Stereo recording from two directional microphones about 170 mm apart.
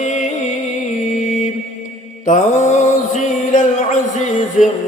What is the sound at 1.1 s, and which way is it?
Mantra, 45° left (ahead or behind).